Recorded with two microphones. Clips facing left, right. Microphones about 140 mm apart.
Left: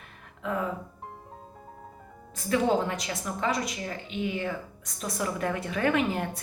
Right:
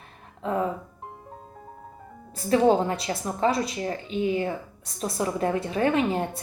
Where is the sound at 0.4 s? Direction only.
30° right (ahead or behind).